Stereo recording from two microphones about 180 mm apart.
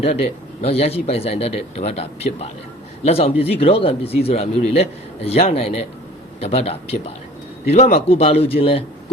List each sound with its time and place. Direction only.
0.6 s speech: 35° left (ahead or behind)